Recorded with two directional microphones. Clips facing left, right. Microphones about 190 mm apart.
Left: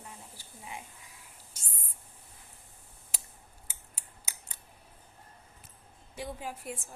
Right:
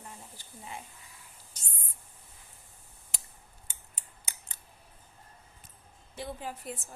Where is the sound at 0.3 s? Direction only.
10° left (ahead or behind).